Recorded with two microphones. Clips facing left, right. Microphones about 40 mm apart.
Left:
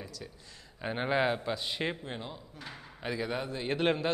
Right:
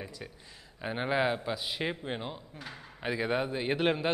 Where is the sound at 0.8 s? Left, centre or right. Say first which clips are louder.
Even; centre.